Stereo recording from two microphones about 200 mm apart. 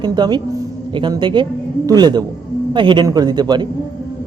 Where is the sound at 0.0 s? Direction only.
20° right (ahead or behind).